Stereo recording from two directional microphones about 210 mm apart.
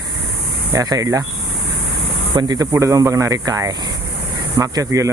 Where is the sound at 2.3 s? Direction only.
20° right (ahead or behind).